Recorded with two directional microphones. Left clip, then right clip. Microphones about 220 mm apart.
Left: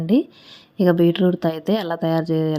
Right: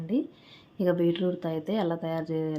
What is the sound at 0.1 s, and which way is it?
A woman's voice, 35° left (ahead or behind).